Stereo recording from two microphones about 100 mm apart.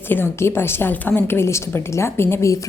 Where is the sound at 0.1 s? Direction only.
25° left (ahead or behind).